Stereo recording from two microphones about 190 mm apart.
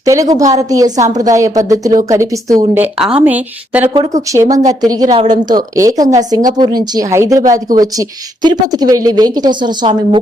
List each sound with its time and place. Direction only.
0.0 s a woman's voice: 15° right (ahead or behind)